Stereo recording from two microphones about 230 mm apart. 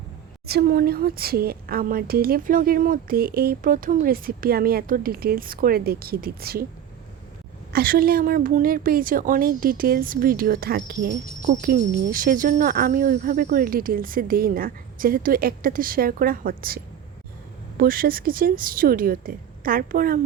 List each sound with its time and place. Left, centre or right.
0.4 s a woman's voice: right
7.7 s a woman's voice: right